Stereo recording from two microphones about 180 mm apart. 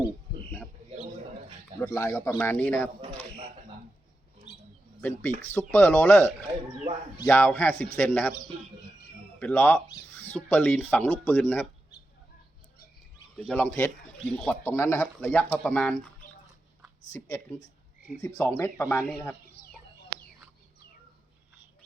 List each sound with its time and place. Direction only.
1.8 s speech: 10° left (ahead or behind)
4.5 s bird: 30° left (ahead or behind)
4.9 s speech: 10° left (ahead or behind)
9.4 s speech: 10° left (ahead or behind)
13.5 s speech: 5° left (ahead or behind)
17.1 s speech: 15° left (ahead or behind)